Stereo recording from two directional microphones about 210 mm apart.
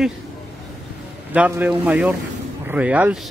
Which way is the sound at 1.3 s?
5° right (ahead or behind).